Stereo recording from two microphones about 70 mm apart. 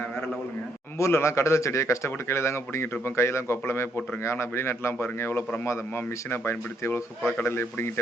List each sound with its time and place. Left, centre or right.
0.9 s a man's voice: left